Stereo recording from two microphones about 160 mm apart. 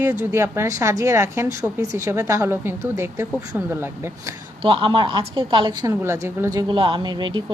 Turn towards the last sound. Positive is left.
turn(degrees=-25)  # may be behind; listen again after turning